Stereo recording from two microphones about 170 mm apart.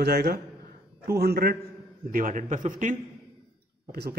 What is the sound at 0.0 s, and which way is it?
A man's voice, 65° right (ahead or behind).